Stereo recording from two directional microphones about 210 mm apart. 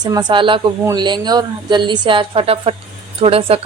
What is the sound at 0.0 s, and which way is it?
A woman's voice, 20° right (ahead or behind).